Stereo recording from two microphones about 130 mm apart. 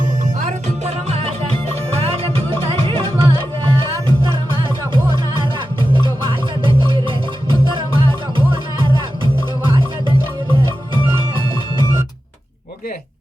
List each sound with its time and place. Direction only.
0.4 s music: 55° right (ahead or behind)
6.7 s music: 40° right (ahead or behind)